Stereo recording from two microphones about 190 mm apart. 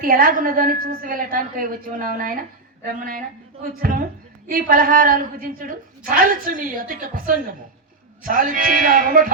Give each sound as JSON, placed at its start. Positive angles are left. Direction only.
{"t": 0.0, "sound": "a woman's voice", "side_deg": -50}